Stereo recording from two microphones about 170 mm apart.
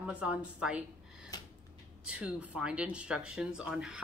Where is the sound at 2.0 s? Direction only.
5° right (ahead or behind).